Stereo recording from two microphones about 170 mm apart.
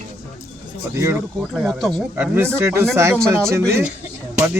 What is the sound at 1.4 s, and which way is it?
Speech, 5° right (ahead or behind).